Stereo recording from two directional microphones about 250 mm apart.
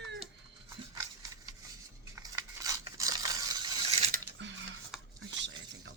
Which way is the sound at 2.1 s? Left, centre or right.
Centre.